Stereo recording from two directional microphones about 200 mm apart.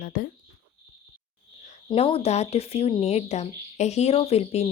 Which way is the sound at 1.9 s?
25° left (ahead or behind).